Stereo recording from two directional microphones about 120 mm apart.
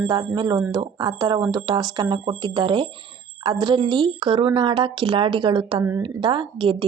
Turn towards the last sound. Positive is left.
turn(degrees=-45)  # may be behind; listen again after turning